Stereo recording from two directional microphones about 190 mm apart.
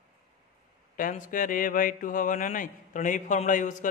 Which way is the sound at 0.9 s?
45° left (ahead or behind).